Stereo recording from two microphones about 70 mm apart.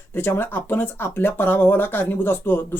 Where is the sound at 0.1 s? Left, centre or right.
Left.